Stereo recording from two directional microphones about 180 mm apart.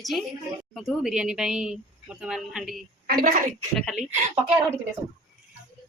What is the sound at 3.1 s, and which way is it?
Speech, 55° right (ahead or behind).